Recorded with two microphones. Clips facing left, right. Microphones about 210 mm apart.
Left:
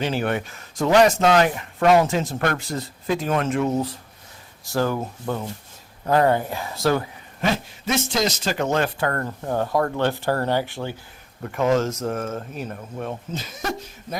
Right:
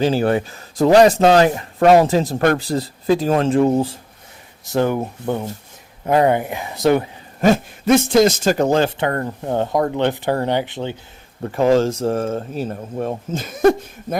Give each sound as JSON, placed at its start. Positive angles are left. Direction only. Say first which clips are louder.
{"t": 0.0, "sound": "speech", "louder": "right 7 dB", "side_deg": -35}
{"t": 7.4, "sound": "speech", "louder": "right 9 dB", "side_deg": -50}
{"t": 11.4, "sound": "speech", "louder": "right 5 dB", "side_deg": -30}
{"t": 13.4, "sound": "speech", "louder": "right 15 dB", "side_deg": -55}